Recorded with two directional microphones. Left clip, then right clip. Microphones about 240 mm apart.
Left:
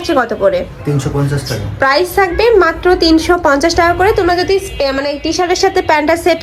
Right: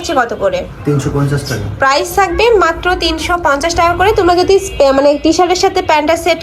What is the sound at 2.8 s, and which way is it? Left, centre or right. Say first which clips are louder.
A woman's voice: left 4 dB; left.